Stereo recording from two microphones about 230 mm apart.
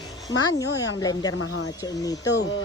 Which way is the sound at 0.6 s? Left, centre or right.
Centre.